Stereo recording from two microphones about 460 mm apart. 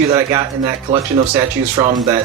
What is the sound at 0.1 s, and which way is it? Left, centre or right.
Speech, centre.